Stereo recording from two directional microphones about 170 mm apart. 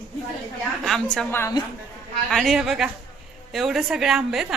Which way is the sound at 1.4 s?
20° left (ahead or behind).